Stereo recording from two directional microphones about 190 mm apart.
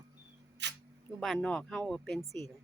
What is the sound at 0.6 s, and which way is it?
Camera, 65° right (ahead or behind).